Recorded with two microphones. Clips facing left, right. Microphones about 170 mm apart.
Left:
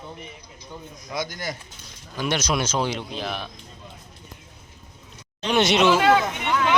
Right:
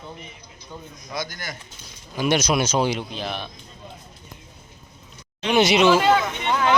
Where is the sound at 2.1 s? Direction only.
10° right (ahead or behind).